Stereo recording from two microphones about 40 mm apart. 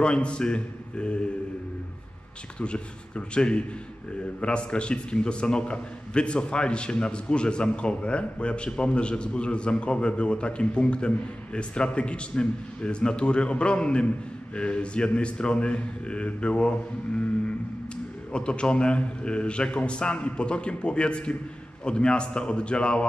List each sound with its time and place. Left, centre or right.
0.0 s a man's voice: left
2.6 s a man's voice: left
18.3 s a man's voice: left